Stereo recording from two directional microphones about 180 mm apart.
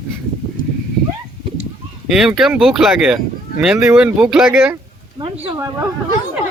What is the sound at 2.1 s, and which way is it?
Speech, 5° right (ahead or behind).